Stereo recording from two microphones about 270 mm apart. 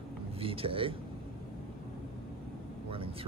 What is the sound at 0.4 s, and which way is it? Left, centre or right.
Speech, centre.